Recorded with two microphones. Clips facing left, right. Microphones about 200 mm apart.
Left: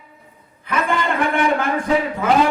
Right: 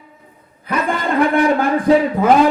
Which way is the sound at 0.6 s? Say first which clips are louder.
Right 2 dB; 40° right (ahead or behind).